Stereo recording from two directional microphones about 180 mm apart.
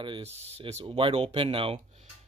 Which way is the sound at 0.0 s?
30° right (ahead or behind).